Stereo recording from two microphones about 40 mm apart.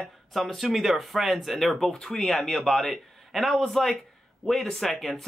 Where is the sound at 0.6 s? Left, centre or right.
Centre.